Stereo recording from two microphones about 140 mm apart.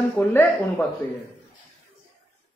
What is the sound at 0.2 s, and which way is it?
Speech, 15° left (ahead or behind).